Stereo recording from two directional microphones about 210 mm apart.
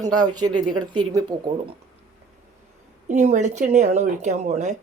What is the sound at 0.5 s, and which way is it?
Speech, 90° right.